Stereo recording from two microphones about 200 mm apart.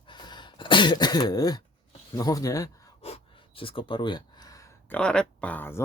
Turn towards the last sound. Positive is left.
turn(degrees=10)  # may be behind; listen again after turning